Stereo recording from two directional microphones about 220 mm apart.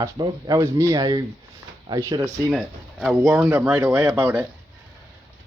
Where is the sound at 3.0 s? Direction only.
5° right (ahead or behind).